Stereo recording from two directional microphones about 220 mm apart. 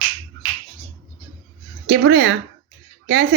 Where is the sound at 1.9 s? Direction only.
50° right (ahead or behind).